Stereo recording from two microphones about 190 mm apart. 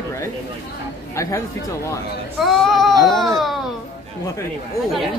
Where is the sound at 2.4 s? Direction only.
Centre (ahead or behind).